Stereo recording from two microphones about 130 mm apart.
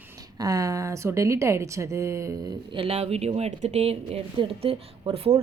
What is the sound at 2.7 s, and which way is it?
Speech, 45° right (ahead or behind).